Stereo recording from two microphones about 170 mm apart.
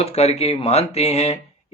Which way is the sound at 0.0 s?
40° left (ahead or behind).